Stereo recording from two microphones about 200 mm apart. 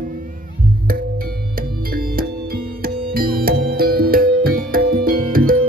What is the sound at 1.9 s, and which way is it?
Music, 45° right (ahead or behind).